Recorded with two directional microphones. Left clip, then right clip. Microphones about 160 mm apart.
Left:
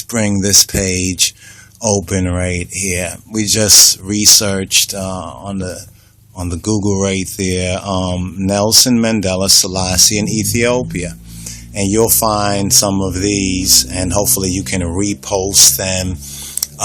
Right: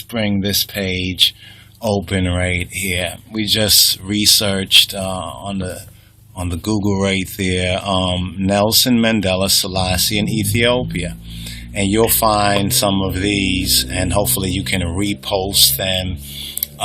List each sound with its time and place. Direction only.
0.1 s speech: 35° left (ahead or behind)
2.0 s speech: 25° left (ahead or behind)